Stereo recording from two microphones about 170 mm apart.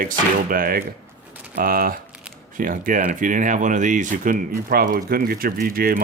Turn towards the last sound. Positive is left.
turn(degrees=-60)  # may be behind; listen again after turning